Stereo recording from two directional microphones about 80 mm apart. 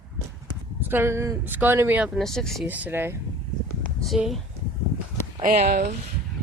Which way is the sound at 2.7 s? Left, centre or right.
Right.